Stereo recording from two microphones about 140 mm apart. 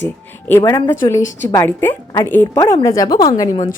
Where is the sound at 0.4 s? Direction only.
15° left (ahead or behind).